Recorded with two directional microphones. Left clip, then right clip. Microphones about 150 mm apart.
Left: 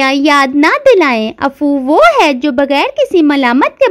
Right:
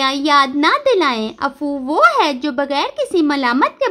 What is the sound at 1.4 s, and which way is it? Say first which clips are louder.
A woman's voice: left 8 dB; 40° left (ahead or behind).